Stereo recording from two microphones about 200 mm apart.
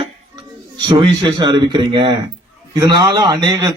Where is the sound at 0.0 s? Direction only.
25° right (ahead or behind).